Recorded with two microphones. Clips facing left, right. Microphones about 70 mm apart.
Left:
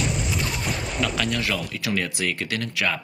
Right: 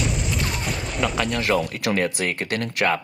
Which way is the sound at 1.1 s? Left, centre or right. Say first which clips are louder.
Right 2 dB; centre.